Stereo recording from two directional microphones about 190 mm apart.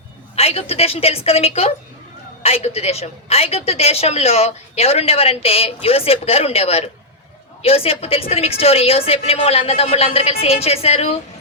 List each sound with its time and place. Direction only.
0.3 s speech: 30° left (ahead or behind)